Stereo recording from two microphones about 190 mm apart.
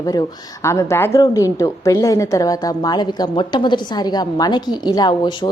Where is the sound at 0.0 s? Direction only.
20° left (ahead or behind).